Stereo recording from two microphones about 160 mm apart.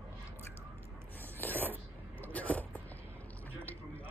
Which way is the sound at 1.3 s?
10° left (ahead or behind).